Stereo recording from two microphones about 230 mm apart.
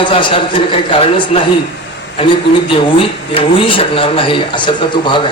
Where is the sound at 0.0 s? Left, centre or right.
Left.